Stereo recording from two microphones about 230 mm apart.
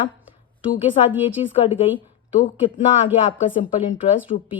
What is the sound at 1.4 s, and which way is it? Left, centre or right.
Speech, left.